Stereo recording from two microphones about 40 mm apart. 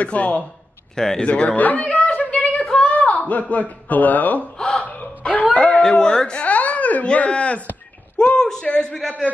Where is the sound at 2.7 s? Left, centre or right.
Left.